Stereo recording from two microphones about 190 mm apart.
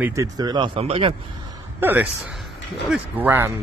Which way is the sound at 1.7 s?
10° right (ahead or behind).